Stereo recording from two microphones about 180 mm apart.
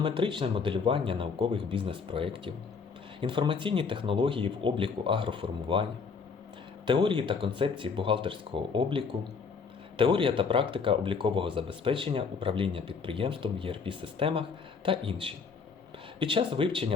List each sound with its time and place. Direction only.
0.0 s speech: 30° right (ahead or behind)
6.8 s speech: 25° right (ahead or behind)